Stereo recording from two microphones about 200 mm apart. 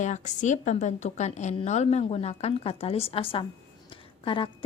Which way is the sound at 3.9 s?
25° left (ahead or behind).